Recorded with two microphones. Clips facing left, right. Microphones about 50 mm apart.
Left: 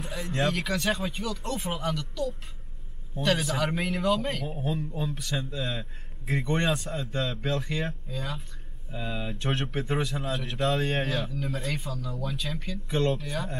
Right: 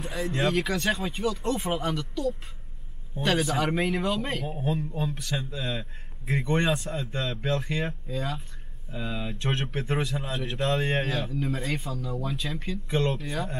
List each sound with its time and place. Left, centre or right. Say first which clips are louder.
0.0 s a sound: right 4 dB; centre
0.3 s a man's voice: right 1 dB; centre
3.7 s a man's voice: even; centre